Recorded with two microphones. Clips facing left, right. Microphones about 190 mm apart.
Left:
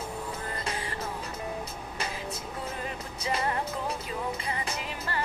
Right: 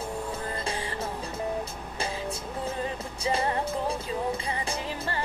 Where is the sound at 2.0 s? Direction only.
30° right (ahead or behind).